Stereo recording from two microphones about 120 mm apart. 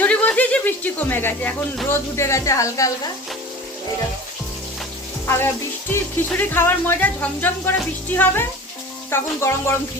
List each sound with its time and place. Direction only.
0.0 s chuckle: 10° left (ahead or behind)
1.9 s speech: 25° left (ahead or behind)
5.9 s speech: 20° left (ahead or behind)